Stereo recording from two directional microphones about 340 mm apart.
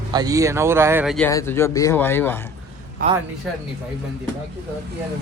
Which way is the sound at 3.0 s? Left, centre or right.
Right.